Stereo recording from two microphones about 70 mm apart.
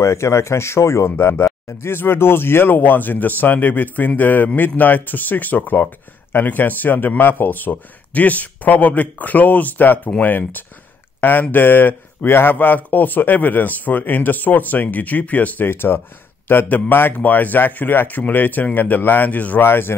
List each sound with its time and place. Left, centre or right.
0.0 s speech: left
1.1 s speech: left